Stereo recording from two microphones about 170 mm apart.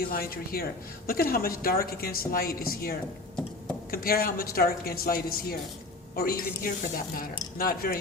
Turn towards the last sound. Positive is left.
turn(degrees=60)  # may be behind; listen again after turning